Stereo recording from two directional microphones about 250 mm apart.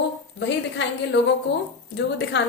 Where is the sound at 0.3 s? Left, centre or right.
Left.